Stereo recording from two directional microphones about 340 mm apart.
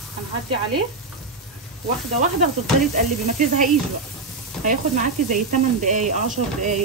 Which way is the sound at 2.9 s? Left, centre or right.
Right.